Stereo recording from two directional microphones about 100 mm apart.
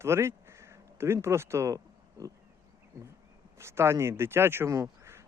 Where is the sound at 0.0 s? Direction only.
25° right (ahead or behind).